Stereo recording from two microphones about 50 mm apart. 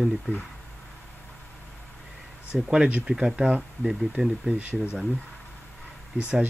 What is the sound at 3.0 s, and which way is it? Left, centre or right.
Speech, centre.